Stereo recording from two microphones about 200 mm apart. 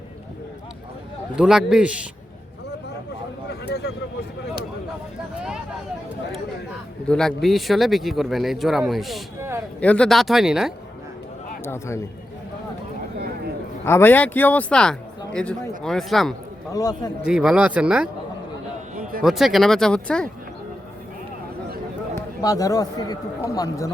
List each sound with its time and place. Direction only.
1.4 s speech: 5° right (ahead or behind)
3.5 s a sound: 55° left (ahead or behind)
7.1 s speech: 5° left (ahead or behind)
11.6 s speech: 15° left (ahead or behind)
13.8 s speech: 10° left (ahead or behind)
16.7 s a man's voice: 20° left (ahead or behind)
17.2 s speech: 5° right (ahead or behind)
19.2 s speech: centre (ahead or behind)
22.1 s speech: 15° left (ahead or behind)